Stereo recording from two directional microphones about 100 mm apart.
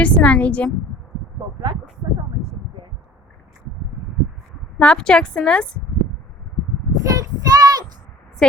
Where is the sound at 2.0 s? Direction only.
40° right (ahead or behind).